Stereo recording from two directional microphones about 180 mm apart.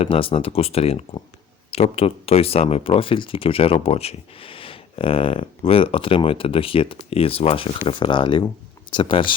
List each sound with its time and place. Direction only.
0.0 s speech: 30° left (ahead or behind)